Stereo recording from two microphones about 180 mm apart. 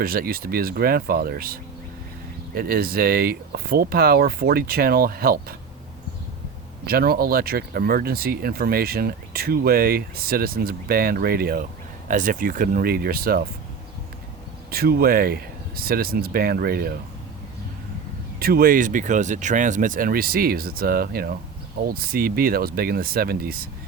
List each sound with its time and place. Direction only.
0.0 s speech: 55° right (ahead or behind)
2.6 s speech: 55° right (ahead or behind)
6.8 s speech: 60° right (ahead or behind)
14.7 s speech: 60° right (ahead or behind)
18.3 s speech: 60° right (ahead or behind)